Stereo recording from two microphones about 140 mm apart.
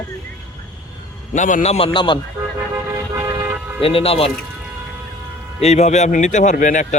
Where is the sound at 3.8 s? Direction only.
40° left (ahead or behind).